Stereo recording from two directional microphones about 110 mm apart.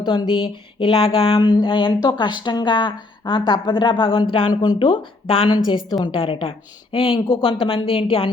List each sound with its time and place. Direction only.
0.3 s speech: 50° left (ahead or behind)
5.5 s a woman's voice: 40° left (ahead or behind)
6.1 s speech: 55° left (ahead or behind)